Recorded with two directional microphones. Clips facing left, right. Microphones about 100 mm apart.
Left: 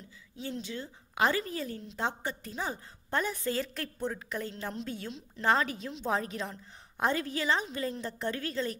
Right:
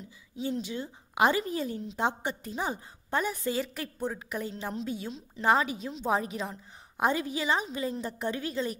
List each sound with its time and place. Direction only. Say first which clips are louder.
0.4 s a woman's voice: right 5 dB; 15° right (ahead or behind)